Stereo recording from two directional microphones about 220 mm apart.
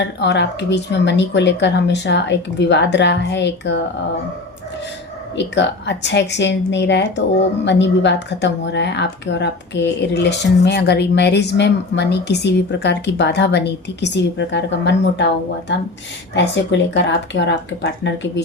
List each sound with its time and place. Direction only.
0.0 s speech: 50° left (ahead or behind)
5.4 s speech: 50° left (ahead or behind)
16.3 s speech: 55° left (ahead or behind)